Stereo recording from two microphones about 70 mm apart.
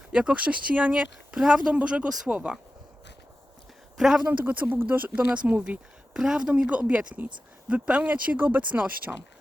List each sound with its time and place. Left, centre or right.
0.1 s speech: centre
3.9 s speech: centre
4.3 s speech: right